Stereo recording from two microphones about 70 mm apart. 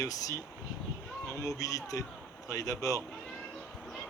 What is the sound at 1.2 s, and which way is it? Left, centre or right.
Speech, left.